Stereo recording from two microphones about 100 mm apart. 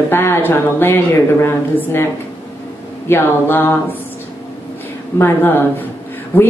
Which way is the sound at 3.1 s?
20° left (ahead or behind).